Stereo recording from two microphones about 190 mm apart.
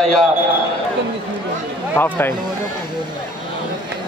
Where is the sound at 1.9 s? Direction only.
10° left (ahead or behind).